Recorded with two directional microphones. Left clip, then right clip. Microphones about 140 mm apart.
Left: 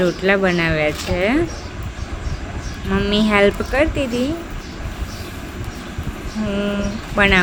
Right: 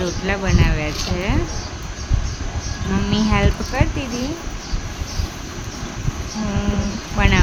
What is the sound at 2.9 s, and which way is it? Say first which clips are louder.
Speech: left 6 dB; 25° left (ahead or behind).